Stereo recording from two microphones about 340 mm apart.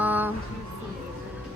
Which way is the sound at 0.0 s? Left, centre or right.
Centre.